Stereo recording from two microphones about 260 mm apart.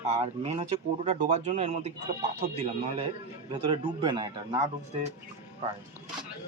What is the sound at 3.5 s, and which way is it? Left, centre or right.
Speech, centre.